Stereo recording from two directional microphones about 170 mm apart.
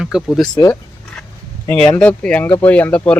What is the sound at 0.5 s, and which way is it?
Speech, 20° left (ahead or behind).